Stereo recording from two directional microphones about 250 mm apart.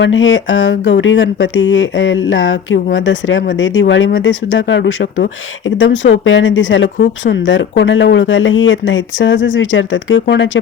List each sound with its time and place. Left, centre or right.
0.0 s speech: left
5.9 s speech: left
6.2 s speech: left